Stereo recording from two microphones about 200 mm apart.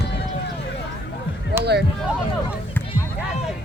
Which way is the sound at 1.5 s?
55° right (ahead or behind).